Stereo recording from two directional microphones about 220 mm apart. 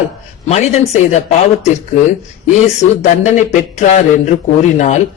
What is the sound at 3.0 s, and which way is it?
A man's voice, 35° left (ahead or behind).